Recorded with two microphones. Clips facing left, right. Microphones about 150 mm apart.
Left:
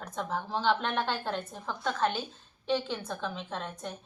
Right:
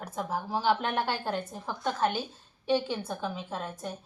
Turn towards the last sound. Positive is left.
turn(degrees=-5)  # may be behind; listen again after turning